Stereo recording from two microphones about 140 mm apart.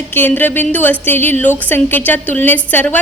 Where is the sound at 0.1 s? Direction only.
15° left (ahead or behind).